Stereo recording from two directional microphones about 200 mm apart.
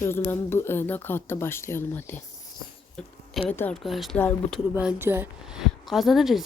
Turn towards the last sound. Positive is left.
turn(degrees=0)  # may be behind; listen again after turning